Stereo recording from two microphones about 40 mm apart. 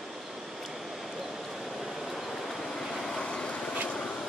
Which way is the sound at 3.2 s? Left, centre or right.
Left.